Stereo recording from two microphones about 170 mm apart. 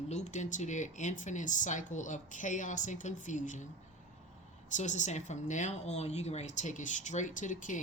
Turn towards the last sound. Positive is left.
turn(degrees=50)  # may be behind; listen again after turning